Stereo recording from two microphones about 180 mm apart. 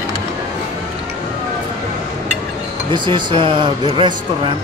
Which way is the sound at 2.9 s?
25° right (ahead or behind).